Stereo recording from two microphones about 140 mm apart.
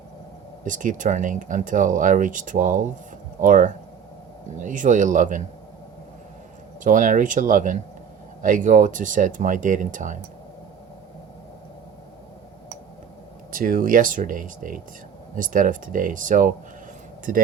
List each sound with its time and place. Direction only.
0.6 s speech: 65° right (ahead or behind)
6.8 s speech: 70° right (ahead or behind)
13.5 s speech: 85° right; by 16.6 s 70° right (ahead or behind)
17.3 s speech: 80° right